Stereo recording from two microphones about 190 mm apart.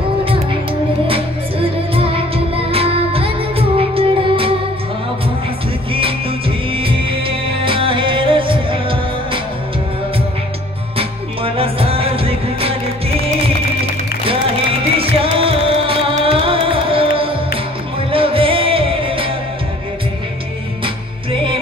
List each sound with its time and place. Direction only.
0.2 s music: 30° right (ahead or behind)
2.0 s music: 30° right (ahead or behind)
5.9 s music: 30° right (ahead or behind)
11.0 s music: 30° right (ahead or behind)
15.0 s music: 30° right (ahead or behind)
20.8 s music: 25° right (ahead or behind)